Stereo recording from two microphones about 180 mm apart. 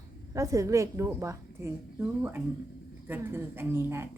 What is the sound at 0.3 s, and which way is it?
A woman's voice, 15° right (ahead or behind).